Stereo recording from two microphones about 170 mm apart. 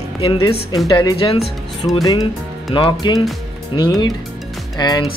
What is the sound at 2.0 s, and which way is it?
Speech, 25° left (ahead or behind).